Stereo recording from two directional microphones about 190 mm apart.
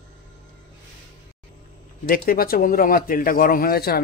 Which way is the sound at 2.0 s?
50° left (ahead or behind).